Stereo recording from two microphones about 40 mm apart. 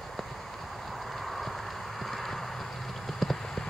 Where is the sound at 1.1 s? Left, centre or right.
Centre.